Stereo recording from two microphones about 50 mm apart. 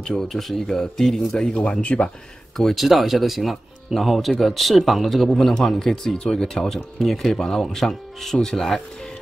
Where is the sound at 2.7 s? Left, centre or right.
Centre.